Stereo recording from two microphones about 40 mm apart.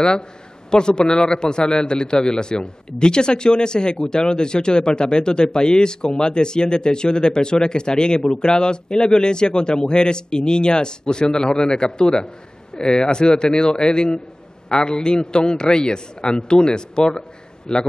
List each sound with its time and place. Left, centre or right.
0.7 s a man's voice: left